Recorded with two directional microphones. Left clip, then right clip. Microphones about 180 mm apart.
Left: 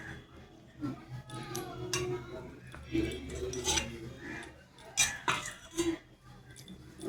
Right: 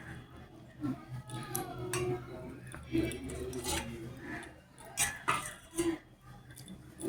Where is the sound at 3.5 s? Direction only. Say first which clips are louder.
Left 5 dB; 20° right (ahead or behind).